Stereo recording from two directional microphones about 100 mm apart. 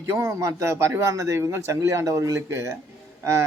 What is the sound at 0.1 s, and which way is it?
A man's voice, 30° right (ahead or behind).